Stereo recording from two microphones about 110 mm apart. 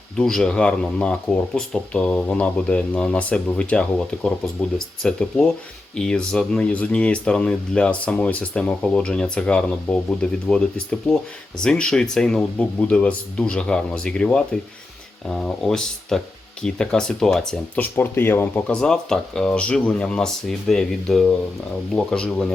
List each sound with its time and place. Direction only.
0.2 s speech: 5° left (ahead or behind)
17.7 s speech: 20° left (ahead or behind)
18.7 s speech: 5° left (ahead or behind)